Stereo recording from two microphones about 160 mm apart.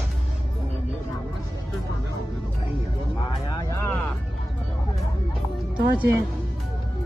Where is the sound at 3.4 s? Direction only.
20° left (ahead or behind).